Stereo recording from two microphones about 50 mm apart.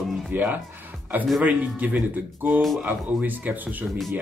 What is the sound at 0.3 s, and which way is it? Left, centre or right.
Speech, right.